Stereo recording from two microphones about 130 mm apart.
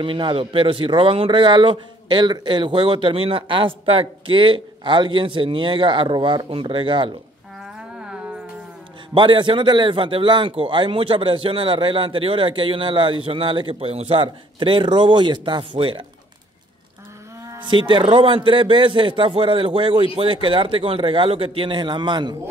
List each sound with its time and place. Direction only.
0.0 s speech: 40° right (ahead or behind)
9.1 s speech: 40° right (ahead or behind)
17.6 s speech: 40° right (ahead or behind)